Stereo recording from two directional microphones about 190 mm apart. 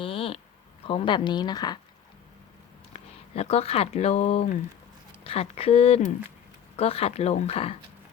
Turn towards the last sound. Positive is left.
turn(degrees=30)  # may be behind; listen again after turning